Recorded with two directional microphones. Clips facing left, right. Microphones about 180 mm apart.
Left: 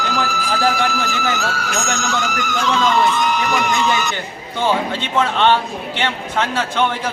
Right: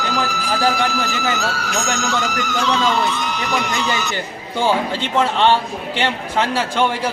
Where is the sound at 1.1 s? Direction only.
50° left (ahead or behind).